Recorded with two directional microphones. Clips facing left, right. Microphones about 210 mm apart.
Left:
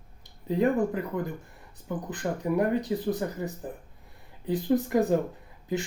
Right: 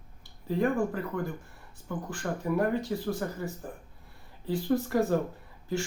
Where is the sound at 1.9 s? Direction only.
20° left (ahead or behind).